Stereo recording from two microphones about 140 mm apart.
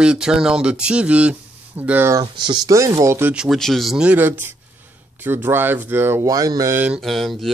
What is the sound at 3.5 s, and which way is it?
Speech, centre (ahead or behind).